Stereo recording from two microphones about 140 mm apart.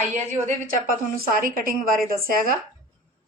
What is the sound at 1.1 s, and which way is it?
A woman's voice, 90° right.